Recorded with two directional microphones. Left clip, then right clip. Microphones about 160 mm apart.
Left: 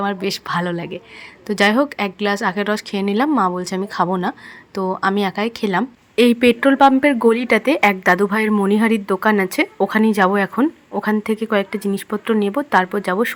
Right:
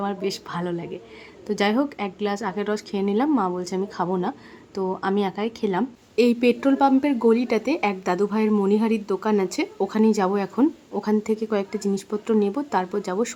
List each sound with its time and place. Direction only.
0.0 s a woman's voice: 20° left (ahead or behind)